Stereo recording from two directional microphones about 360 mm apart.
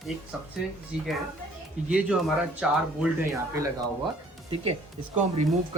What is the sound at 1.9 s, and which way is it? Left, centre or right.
Speech, centre.